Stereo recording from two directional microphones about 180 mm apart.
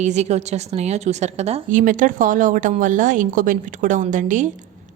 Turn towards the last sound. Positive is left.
turn(degrees=-45)  # may be behind; listen again after turning